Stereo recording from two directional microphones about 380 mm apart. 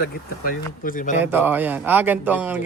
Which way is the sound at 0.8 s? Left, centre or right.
Left.